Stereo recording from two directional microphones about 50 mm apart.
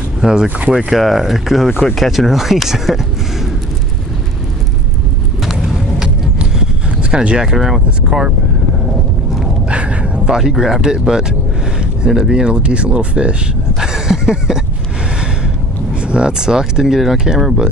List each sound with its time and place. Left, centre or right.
0.2 s speech: centre
0.7 s speech: centre
5.4 s vehicle: centre
6.0 s vehicle: centre
9.7 s a sound: right
10.2 s speech: centre